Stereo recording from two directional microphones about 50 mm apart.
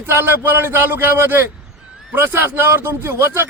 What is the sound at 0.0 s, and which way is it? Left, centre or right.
A man's voice, right.